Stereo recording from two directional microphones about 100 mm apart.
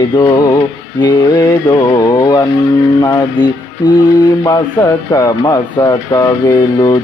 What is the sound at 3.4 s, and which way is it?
Speech, 45° left (ahead or behind).